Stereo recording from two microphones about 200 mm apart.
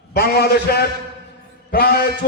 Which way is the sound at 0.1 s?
50° left (ahead or behind).